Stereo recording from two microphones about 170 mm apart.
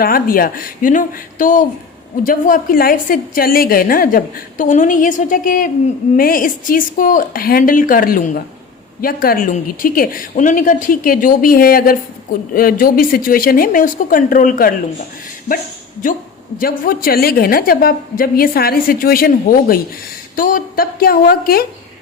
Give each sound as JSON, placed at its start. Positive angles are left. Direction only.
{"t": 0.0, "sound": "a woman's voice", "side_deg": 60}
{"t": 16.6, "sound": "a woman's voice", "side_deg": 60}